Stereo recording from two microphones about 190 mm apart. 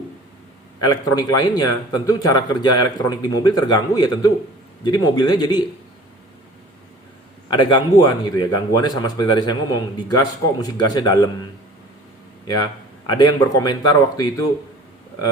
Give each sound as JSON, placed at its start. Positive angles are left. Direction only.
{"t": 0.8, "sound": "a man's voice", "side_deg": 20}
{"t": 7.5, "sound": "a man's voice", "side_deg": 25}
{"t": 13.1, "sound": "a man's voice", "side_deg": 20}